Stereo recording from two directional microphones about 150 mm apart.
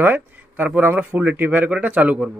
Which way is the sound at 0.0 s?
10° right (ahead or behind).